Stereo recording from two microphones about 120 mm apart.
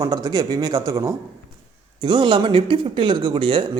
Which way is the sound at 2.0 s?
40° right (ahead or behind).